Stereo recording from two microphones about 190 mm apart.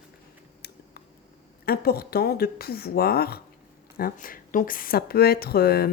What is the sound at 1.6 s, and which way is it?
A woman's voice, 55° left (ahead or behind).